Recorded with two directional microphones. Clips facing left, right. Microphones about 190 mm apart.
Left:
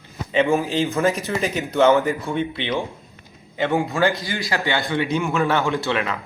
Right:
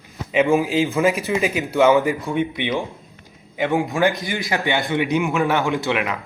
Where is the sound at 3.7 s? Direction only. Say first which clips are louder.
Right 1 dB; 15° right (ahead or behind).